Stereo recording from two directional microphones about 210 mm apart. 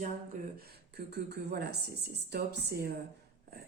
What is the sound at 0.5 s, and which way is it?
Speech, 45° right (ahead or behind).